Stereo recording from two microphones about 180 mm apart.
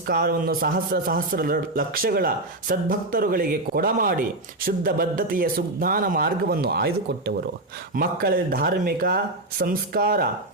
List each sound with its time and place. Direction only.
0.1 s a man's voice: 60° right (ahead or behind)
7.9 s a man's voice: 55° right (ahead or behind)